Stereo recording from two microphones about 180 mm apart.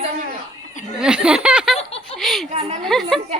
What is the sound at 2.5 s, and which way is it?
Speech, 40° right (ahead or behind).